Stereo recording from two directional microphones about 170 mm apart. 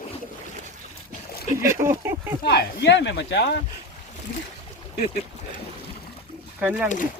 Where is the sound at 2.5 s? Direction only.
90° left.